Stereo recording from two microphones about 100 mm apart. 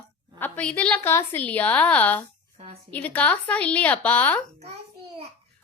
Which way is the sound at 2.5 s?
90° right.